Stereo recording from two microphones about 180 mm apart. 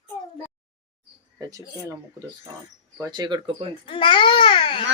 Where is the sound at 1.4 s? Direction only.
20° right (ahead or behind).